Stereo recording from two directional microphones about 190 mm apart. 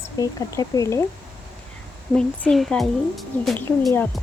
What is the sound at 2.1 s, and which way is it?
Speech, 5° left (ahead or behind).